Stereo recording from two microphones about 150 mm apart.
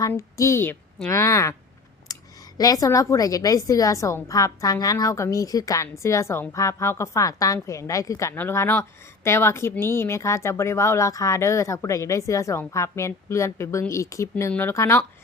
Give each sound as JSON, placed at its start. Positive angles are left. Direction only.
{"t": 0.1, "sound": "a woman's voice", "side_deg": 20}
{"t": 2.1, "sound": "a sound", "side_deg": 25}
{"t": 2.6, "sound": "a woman's voice", "side_deg": 25}